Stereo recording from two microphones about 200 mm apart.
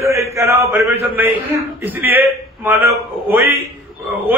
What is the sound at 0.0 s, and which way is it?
A man's voice, 15° right (ahead or behind).